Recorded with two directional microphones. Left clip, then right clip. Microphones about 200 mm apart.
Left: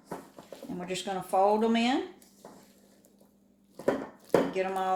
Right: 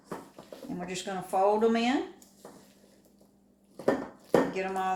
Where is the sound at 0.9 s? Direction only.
35° left (ahead or behind).